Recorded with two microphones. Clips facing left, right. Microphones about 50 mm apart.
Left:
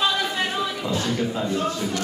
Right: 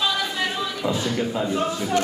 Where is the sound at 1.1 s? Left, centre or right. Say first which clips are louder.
Right 1 dB; centre.